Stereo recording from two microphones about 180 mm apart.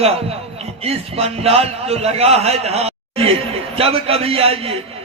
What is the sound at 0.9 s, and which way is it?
A man's voice, 35° right (ahead or behind).